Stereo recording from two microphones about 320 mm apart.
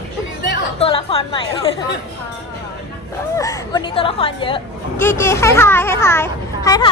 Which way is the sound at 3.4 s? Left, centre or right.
Centre.